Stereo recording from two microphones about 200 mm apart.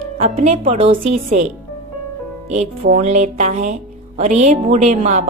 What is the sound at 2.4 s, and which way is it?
A woman's voice, 35° right (ahead or behind).